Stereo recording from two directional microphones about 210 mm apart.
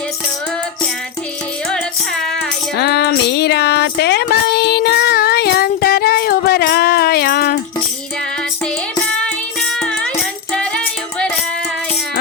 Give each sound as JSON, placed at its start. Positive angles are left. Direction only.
{"t": 1.7, "sound": "music", "side_deg": 0}
{"t": 2.7, "sound": "a sound", "side_deg": 50}
{"t": 9.7, "sound": "music", "side_deg": 0}